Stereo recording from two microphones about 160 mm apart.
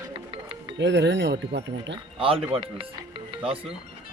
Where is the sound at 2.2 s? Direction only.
35° right (ahead or behind).